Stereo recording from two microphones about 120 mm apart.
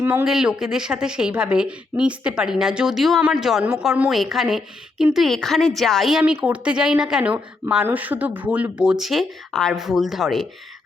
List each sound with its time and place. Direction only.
0.0 s speech: 20° right (ahead or behind)
0.3 s a woman's voice: 5° right (ahead or behind)